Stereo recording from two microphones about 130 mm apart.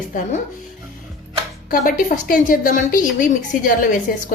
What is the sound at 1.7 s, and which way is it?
Speech, 90° left.